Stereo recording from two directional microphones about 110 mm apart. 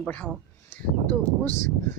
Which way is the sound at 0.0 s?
10° left (ahead or behind).